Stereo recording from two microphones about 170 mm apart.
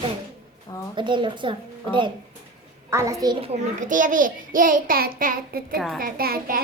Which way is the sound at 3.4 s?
40° right (ahead or behind).